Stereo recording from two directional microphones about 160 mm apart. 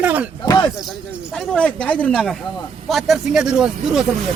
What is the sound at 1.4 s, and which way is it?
Speech, 5° left (ahead or behind).